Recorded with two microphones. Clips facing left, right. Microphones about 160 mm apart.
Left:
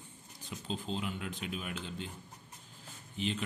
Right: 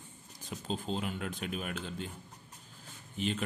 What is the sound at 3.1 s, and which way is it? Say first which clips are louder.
Speech: right 2 dB; 45° right (ahead or behind).